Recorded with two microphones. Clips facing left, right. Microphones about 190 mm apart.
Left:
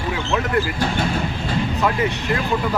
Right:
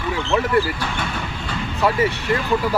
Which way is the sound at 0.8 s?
30° left (ahead or behind).